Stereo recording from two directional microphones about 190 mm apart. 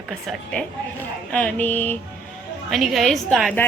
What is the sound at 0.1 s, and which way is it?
A woman's voice, centre (ahead or behind).